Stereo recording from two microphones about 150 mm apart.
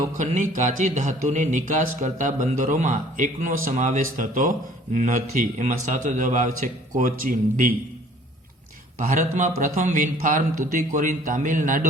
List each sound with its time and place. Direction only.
0.2 s a man's voice: 55° right (ahead or behind)
9.1 s a man's voice: 60° right (ahead or behind)